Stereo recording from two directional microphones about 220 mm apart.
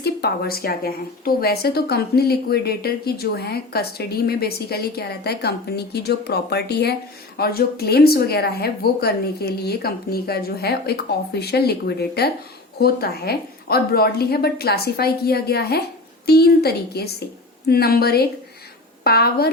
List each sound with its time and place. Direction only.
0.0 s a woman's voice: 45° left (ahead or behind)